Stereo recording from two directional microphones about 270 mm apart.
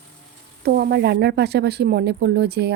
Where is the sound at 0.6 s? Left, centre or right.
Right.